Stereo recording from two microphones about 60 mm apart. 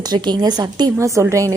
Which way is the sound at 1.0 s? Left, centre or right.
Right.